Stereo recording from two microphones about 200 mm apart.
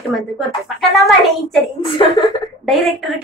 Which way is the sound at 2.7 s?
Centre (ahead or behind).